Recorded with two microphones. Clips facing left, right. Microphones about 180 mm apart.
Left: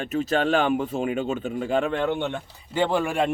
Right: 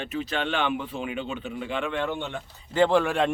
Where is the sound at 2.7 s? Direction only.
5° left (ahead or behind).